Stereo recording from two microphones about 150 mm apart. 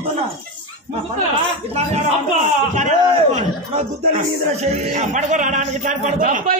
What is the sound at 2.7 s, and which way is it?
A man's voice, 50° right (ahead or behind).